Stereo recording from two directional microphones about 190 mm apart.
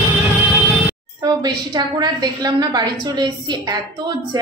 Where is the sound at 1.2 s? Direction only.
20° right (ahead or behind).